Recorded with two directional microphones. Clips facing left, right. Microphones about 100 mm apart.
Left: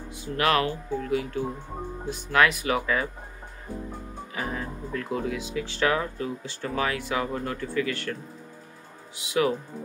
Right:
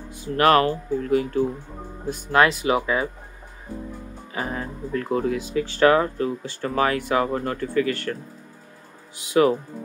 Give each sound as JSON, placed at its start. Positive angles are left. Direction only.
{"t": 0.4, "sound": "speech", "side_deg": -40}
{"t": 2.3, "sound": "speech", "side_deg": -30}
{"t": 4.4, "sound": "speech", "side_deg": -40}
{"t": 9.3, "sound": "speech", "side_deg": -40}